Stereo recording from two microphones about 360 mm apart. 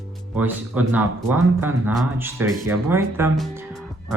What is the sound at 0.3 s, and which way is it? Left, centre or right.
Speech, centre.